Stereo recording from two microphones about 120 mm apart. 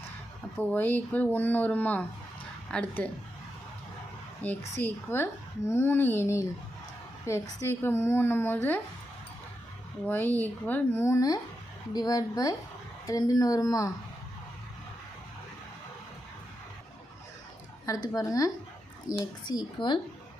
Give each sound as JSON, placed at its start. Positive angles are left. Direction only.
{"t": 0.6, "sound": "a woman's voice", "side_deg": 15}
{"t": 4.4, "sound": "speech", "side_deg": 15}
{"t": 10.1, "sound": "speech", "side_deg": 15}
{"t": 17.8, "sound": "speech", "side_deg": 30}